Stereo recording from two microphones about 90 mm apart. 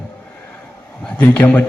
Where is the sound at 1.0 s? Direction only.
15° left (ahead or behind).